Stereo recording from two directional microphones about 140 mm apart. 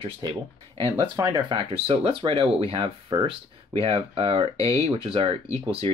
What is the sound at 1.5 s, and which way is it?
Speech, 40° right (ahead or behind).